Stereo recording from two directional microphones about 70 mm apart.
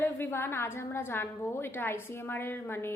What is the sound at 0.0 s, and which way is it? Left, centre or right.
A woman's voice, left.